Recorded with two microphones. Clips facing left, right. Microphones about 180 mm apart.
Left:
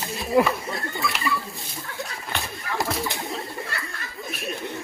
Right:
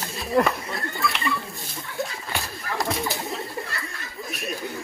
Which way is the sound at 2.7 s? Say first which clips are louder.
Even; centre (ahead or behind).